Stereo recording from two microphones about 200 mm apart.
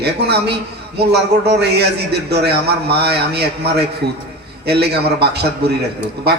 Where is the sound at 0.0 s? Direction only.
55° right (ahead or behind).